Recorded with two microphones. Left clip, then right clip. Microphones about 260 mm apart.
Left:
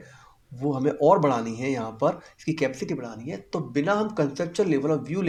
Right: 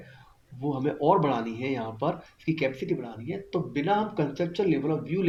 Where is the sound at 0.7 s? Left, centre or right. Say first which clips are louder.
Left 4 dB; left.